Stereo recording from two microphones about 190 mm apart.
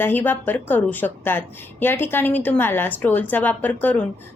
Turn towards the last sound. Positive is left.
turn(degrees=10)  # may be behind; listen again after turning